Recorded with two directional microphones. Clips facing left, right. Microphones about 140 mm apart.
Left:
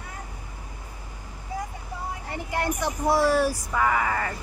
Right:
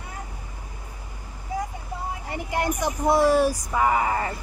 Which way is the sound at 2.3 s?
15° right (ahead or behind).